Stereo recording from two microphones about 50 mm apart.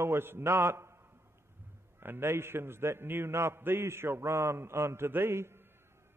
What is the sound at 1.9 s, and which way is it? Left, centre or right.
A man's voice, right.